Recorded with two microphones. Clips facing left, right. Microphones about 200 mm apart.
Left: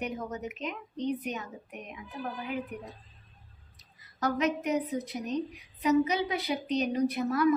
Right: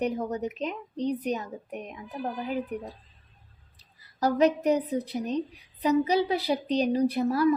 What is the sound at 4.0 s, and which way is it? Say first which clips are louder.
Speech: right 6 dB; 35° right (ahead or behind).